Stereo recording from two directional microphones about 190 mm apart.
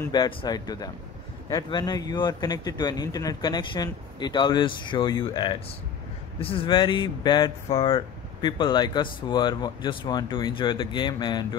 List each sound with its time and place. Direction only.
0.1 s speech: 20° left (ahead or behind)